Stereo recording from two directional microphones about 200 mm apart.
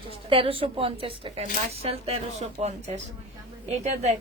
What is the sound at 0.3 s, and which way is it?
A woman's voice, 25° right (ahead or behind).